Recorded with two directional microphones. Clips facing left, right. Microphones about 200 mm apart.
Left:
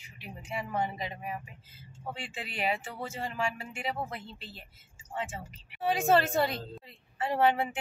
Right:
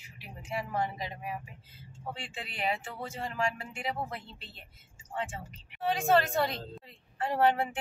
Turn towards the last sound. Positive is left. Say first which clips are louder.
# even
turn(degrees=0)  # may be behind; listen again after turning